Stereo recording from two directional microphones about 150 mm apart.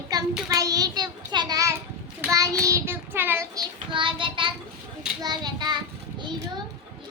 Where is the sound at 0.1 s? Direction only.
25° right (ahead or behind).